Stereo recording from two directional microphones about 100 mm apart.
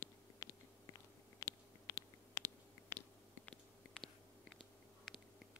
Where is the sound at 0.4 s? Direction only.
35° left (ahead or behind).